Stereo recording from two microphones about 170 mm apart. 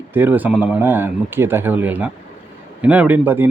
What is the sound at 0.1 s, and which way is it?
Speech, 10° right (ahead or behind).